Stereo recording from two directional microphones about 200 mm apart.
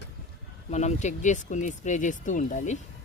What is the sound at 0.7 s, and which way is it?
Speech, 35° left (ahead or behind).